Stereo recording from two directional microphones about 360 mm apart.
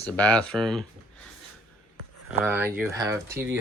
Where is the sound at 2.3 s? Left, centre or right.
Centre.